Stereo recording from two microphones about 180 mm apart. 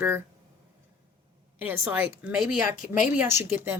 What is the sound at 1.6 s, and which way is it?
Speech, 10° right (ahead or behind).